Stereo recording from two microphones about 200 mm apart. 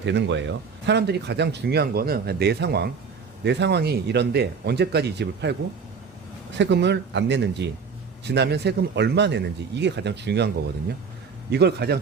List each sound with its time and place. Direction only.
0.0 s speech: 60° right (ahead or behind)
11.5 s speech: 55° right (ahead or behind)